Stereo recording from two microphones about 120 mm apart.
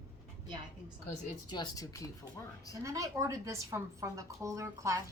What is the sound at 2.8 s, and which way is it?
A woman's voice, 30° right (ahead or behind).